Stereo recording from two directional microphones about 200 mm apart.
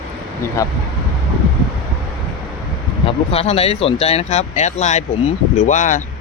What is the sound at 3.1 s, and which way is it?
Speech, 30° left (ahead or behind).